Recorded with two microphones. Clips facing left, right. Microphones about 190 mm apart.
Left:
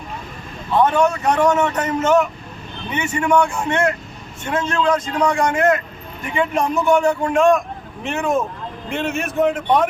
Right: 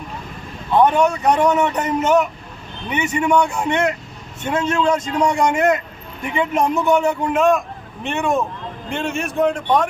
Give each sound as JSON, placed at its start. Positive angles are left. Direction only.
{"t": 0.8, "sound": "a man's voice", "side_deg": -15}
{"t": 7.3, "sound": "a man's voice", "side_deg": 0}